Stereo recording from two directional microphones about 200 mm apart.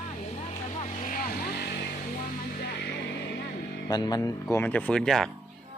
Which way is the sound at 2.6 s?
55° left (ahead or behind).